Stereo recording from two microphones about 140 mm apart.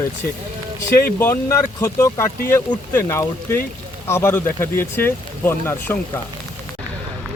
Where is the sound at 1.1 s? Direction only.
20° left (ahead or behind).